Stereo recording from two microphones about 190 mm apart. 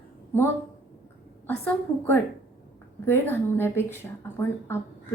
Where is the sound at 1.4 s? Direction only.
10° left (ahead or behind).